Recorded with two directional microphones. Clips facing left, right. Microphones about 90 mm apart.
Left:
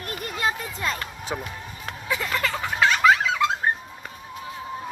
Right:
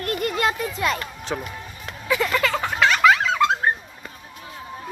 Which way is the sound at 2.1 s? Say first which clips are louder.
Right 5 dB; 90° right.